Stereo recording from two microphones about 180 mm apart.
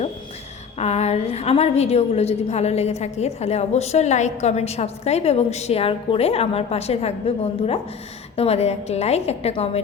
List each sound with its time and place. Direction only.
0.8 s a woman's voice: 35° left (ahead or behind)